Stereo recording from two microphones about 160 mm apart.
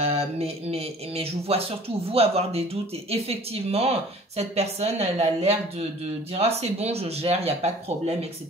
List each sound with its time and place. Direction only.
0.0 s speech: 40° right (ahead or behind)